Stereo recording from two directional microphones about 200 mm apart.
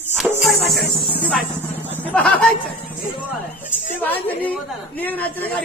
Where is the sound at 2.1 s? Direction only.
5° left (ahead or behind).